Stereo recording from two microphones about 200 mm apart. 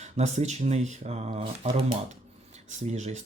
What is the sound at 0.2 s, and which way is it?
Speech, 35° right (ahead or behind).